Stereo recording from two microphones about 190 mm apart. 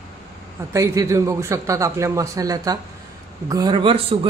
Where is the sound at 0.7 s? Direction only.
15° right (ahead or behind).